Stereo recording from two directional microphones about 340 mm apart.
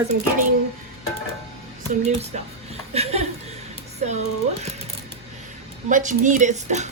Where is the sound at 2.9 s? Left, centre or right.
Centre.